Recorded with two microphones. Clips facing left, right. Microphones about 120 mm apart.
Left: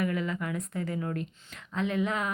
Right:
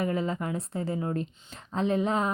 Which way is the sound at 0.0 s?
30° right (ahead or behind).